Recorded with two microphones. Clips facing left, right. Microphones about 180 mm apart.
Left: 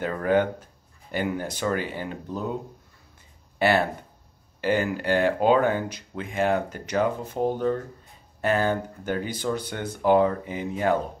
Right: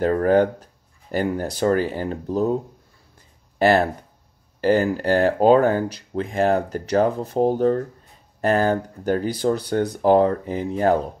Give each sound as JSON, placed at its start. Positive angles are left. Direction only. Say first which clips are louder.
{"t": 0.0, "sound": "speech", "louder": "right 6 dB", "side_deg": -40}
{"t": 3.5, "sound": "speech", "louder": "right 5 dB", "side_deg": -40}